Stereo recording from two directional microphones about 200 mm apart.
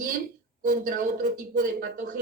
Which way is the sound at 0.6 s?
45° right (ahead or behind).